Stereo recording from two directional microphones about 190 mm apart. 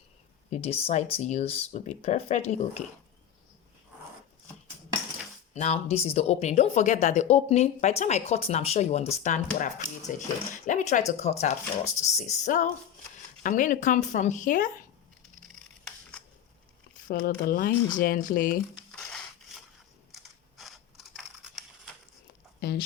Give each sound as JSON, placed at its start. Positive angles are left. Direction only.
{"t": 0.5, "sound": "speech", "side_deg": 30}
{"t": 5.5, "sound": "speech", "side_deg": 35}
{"t": 17.2, "sound": "speech", "side_deg": 50}
{"t": 18.9, "sound": "a sound", "side_deg": 5}
{"t": 20.2, "sound": "scissors", "side_deg": 0}